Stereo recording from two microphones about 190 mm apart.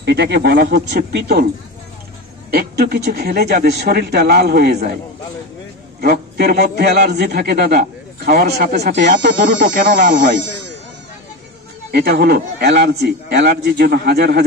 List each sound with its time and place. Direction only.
0.0 s a man's voice: 65° right (ahead or behind)
2.5 s a man's voice: 55° right (ahead or behind)
5.9 s a man's voice: 55° right (ahead or behind); by 10.8 s 70° right (ahead or behind)
11.9 s a man's voice: 60° right (ahead or behind)